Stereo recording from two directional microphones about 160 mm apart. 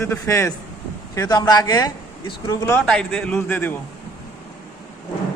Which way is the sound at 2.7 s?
5° left (ahead or behind).